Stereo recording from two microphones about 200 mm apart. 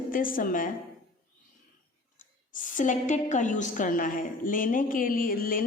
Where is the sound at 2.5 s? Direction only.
40° left (ahead or behind).